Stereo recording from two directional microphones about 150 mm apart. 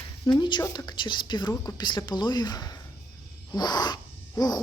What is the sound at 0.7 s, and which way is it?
Speech, 25° left (ahead or behind).